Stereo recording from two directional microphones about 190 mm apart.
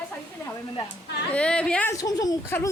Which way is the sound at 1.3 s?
5° left (ahead or behind).